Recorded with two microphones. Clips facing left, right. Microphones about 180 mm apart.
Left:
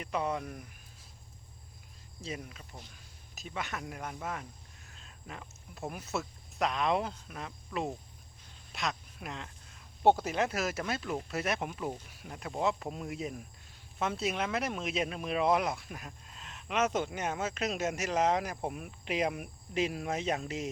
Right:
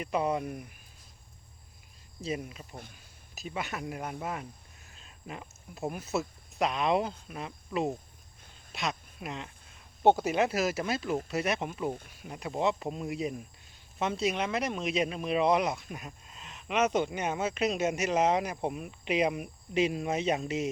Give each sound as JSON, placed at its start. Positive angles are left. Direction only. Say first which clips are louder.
{"t": 0.0, "sound": "speech", "louder": "right 4 dB", "side_deg": -10}
{"t": 2.2, "sound": "speech", "louder": "right 6 dB", "side_deg": -15}
{"t": 10.2, "sound": "speech", "louder": "right 4 dB", "side_deg": -10}
{"t": 17.7, "sound": "speech", "louder": "right 4 dB", "side_deg": -15}
{"t": 18.0, "sound": "speech", "louder": "right 2 dB", "side_deg": 0}